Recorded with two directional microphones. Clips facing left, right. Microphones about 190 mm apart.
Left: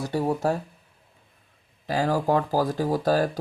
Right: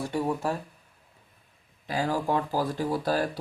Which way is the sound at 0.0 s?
35° left (ahead or behind).